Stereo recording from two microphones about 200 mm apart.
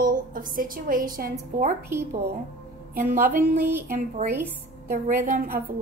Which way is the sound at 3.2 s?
45° right (ahead or behind).